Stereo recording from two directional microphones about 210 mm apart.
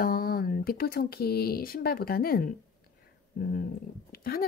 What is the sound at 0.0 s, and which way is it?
Speech, 45° left (ahead or behind).